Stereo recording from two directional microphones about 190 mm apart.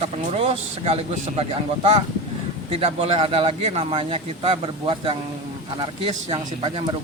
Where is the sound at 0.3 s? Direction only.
30° right (ahead or behind).